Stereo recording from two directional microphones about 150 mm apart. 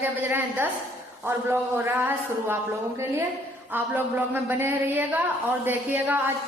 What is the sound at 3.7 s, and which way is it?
A woman's voice, 15° right (ahead or behind).